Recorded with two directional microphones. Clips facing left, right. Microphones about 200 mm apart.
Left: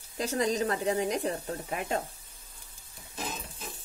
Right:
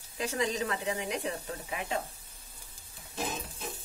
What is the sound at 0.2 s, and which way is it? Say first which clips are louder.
Speech: left 3 dB; 40° left (ahead or behind).